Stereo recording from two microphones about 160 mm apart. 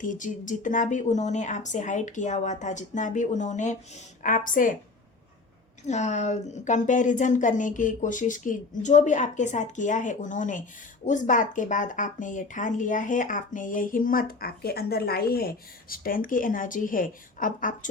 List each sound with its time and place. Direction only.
0.0 s a woman's voice: 55° left (ahead or behind)
5.8 s a woman's voice: 45° left (ahead or behind)